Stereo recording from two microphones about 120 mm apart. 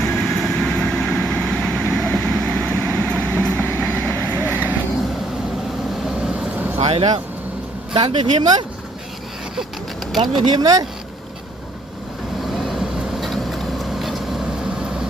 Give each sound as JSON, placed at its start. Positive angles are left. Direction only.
{"t": 0.0, "sound": "vehicle", "side_deg": 0}
{"t": 4.4, "sound": "vehicle", "side_deg": -20}
{"t": 6.1, "sound": "vehicle", "side_deg": -5}
{"t": 6.7, "sound": "vehicle", "side_deg": -55}
{"t": 7.9, "sound": "speech", "side_deg": -45}
{"t": 10.4, "sound": "speech", "side_deg": -35}
{"t": 12.5, "sound": "vehicle", "side_deg": -5}